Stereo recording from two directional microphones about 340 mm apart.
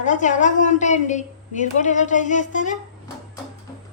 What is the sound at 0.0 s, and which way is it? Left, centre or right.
A woman's voice, left.